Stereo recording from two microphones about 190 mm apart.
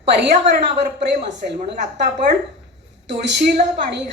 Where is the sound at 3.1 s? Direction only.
65° right (ahead or behind).